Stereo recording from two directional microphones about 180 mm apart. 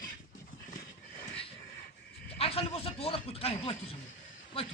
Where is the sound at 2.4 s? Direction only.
35° left (ahead or behind).